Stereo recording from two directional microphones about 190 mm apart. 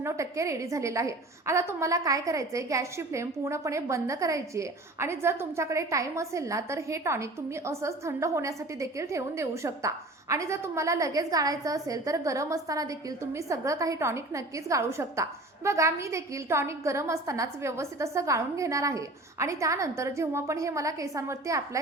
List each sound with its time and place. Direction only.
0.0 s a woman's voice: 15° right (ahead or behind)